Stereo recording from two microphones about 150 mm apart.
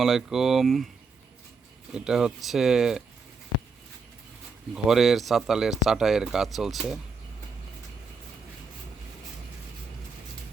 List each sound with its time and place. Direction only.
0.0 s speech: centre (ahead or behind)
1.9 s speech: 5° right (ahead or behind)
4.7 s speech: centre (ahead or behind)